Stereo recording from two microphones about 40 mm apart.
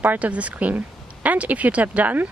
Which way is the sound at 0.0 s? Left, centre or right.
Right.